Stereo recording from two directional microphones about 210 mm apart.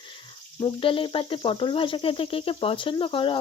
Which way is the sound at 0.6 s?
25° left (ahead or behind).